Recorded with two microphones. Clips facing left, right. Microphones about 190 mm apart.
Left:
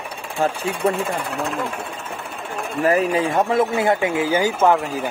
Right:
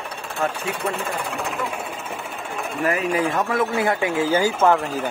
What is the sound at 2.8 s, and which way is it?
Speech, 35° left (ahead or behind).